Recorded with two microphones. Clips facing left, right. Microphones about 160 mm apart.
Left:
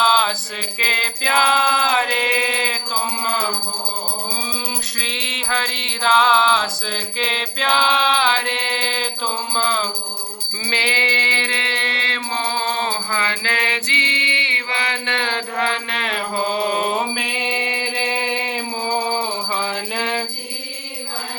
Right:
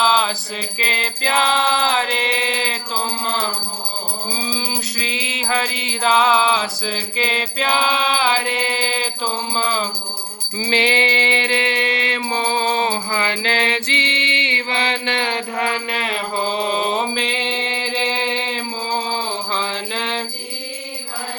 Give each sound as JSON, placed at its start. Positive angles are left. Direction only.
{"t": 0.0, "sound": "mantra", "side_deg": 0}
{"t": 4.4, "sound": "mantra", "side_deg": 0}
{"t": 9.6, "sound": "music", "side_deg": 0}
{"t": 10.7, "sound": "mantra", "side_deg": -20}
{"t": 19.5, "sound": "music", "side_deg": 10}